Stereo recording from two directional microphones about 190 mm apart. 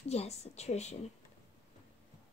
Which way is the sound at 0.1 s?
35° left (ahead or behind).